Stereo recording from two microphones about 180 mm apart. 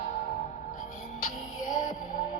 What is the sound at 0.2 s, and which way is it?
Music, 45° left (ahead or behind).